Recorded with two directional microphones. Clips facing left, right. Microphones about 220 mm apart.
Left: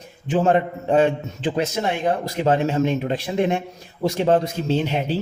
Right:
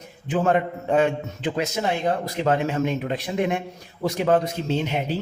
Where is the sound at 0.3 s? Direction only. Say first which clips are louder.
Left 3 dB; 30° left (ahead or behind).